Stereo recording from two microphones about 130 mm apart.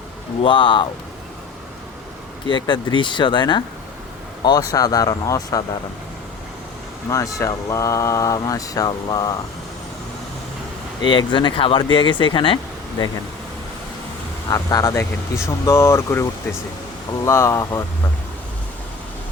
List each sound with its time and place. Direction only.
0.4 s speech: 40° left (ahead or behind)
2.5 s speech: 40° left (ahead or behind)
7.1 s speech: 25° left (ahead or behind)
11.0 s speech: 40° left (ahead or behind)
14.5 s speech: 25° left (ahead or behind)